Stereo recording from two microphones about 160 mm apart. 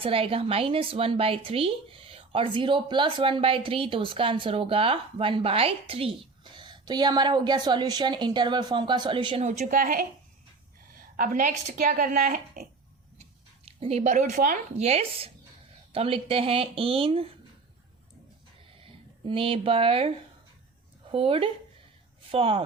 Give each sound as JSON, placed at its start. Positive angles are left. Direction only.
{"t": 0.0, "sound": "a woman's voice", "side_deg": -35}
{"t": 9.7, "sound": "a woman's voice", "side_deg": -60}
{"t": 11.2, "sound": "a woman's voice", "side_deg": -55}
{"t": 13.7, "sound": "speech", "side_deg": -40}
{"t": 14.8, "sound": "a woman's voice", "side_deg": -40}
{"t": 18.8, "sound": "a woman's voice", "side_deg": -35}